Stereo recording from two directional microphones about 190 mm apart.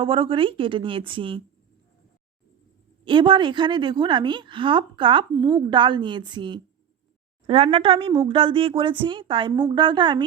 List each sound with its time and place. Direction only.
0.0 s a woman's voice: 30° right (ahead or behind)
3.0 s a woman's voice: 25° right (ahead or behind)